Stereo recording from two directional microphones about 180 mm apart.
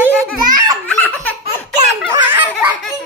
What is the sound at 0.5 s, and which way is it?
Laughter, 20° right (ahead or behind).